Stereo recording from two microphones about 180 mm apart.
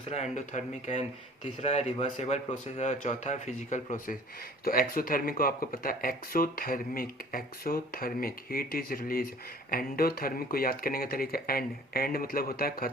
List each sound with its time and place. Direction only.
0.0 s speech: 35° left (ahead or behind); by 12.9 s 55° left (ahead or behind)